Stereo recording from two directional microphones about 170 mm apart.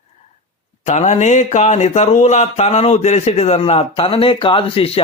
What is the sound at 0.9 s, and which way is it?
Speech, 40° left (ahead or behind).